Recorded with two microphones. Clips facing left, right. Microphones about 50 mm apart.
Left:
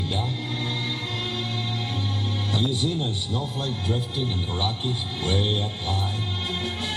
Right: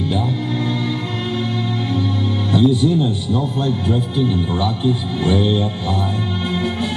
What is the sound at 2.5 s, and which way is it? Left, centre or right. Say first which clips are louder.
Music: right 12 dB; right.